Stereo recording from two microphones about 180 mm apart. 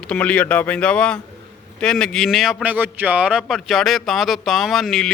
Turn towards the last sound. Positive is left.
turn(degrees=0)  # may be behind; listen again after turning